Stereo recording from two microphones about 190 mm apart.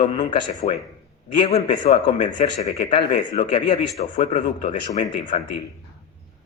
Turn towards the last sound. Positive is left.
turn(degrees=40)  # may be behind; listen again after turning